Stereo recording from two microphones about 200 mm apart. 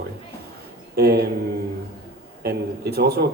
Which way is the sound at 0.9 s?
50° right (ahead or behind).